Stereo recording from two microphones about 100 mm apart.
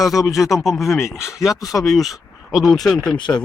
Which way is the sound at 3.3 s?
25° left (ahead or behind).